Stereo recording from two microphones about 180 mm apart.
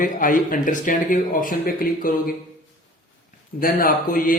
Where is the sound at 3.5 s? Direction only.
50° left (ahead or behind).